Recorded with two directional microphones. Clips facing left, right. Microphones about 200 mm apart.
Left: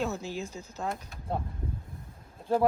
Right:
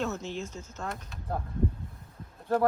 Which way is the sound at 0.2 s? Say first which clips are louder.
Even; 35° left (ahead or behind).